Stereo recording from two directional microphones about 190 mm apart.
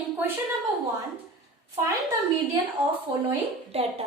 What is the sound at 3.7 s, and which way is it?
Speech, 35° right (ahead or behind).